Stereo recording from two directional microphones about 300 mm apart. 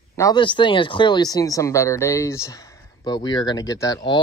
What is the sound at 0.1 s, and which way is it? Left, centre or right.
Speech, centre.